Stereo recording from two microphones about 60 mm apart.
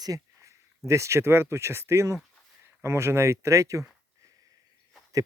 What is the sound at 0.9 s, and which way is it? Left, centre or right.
Speech, right.